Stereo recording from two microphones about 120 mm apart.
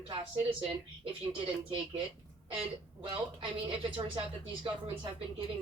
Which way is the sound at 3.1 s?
45° right (ahead or behind).